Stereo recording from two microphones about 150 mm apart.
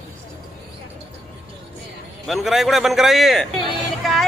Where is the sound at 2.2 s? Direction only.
Centre (ahead or behind).